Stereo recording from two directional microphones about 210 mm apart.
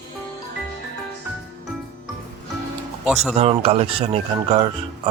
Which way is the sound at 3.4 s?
30° right (ahead or behind).